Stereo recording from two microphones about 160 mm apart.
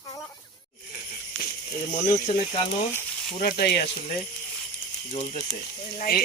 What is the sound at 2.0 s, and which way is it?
Speech, 55° left (ahead or behind).